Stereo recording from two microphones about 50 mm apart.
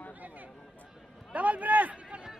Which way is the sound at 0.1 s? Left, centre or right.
Right.